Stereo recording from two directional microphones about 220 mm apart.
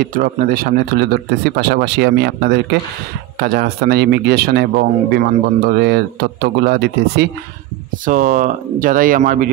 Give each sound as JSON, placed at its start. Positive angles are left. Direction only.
{"t": 0.0, "sound": "speech", "side_deg": -40}